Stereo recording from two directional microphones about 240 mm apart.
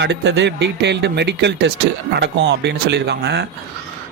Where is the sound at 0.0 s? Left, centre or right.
Right.